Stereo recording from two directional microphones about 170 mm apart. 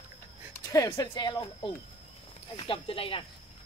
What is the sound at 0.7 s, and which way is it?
Speech, 20° left (ahead or behind).